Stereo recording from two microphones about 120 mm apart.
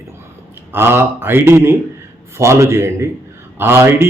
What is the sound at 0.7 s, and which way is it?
Speech, 20° right (ahead or behind).